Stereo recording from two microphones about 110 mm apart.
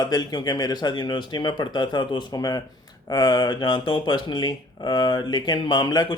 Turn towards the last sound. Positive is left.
turn(degrees=40)  # may be behind; listen again after turning